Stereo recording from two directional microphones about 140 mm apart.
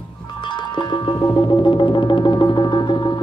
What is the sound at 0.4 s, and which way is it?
Music, 35° left (ahead or behind).